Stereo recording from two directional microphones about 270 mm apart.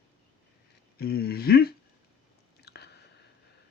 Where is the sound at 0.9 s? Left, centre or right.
Left.